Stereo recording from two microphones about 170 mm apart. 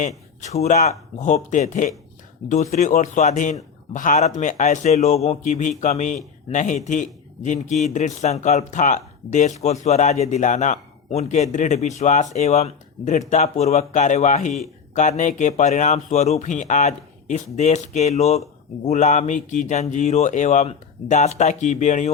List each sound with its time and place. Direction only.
0.4 s speech: 40° left (ahead or behind)